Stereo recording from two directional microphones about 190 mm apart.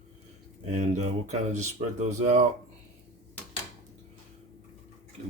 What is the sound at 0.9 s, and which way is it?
Speech, 40° right (ahead or behind).